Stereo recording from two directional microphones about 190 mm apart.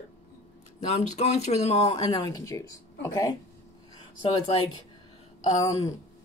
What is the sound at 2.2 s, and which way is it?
Speech, 20° left (ahead or behind).